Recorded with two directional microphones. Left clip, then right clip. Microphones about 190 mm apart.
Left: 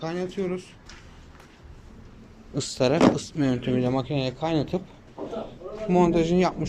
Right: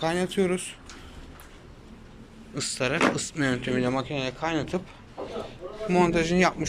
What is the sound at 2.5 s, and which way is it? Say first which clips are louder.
Speech: left 4 dB; 15° left (ahead or behind).